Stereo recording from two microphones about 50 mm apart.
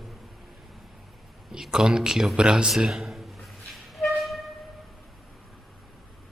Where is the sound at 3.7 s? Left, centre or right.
Centre.